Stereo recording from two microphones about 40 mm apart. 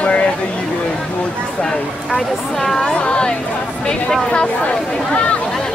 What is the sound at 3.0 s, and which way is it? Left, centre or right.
Speech, left.